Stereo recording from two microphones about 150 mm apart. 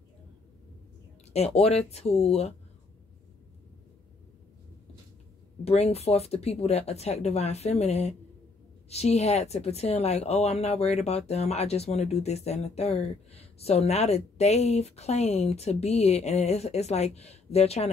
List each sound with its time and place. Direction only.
1.3 s a woman's voice: 45° left (ahead or behind)
5.6 s a woman's voice: 45° left (ahead or behind)